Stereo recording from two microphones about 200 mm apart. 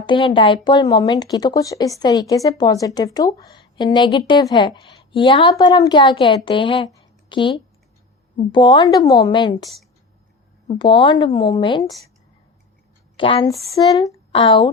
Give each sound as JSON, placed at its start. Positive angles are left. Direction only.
{"t": 0.0, "sound": "a woman's voice", "side_deg": 25}
{"t": 10.8, "sound": "a woman's voice", "side_deg": 25}
{"t": 13.1, "sound": "a woman's voice", "side_deg": 25}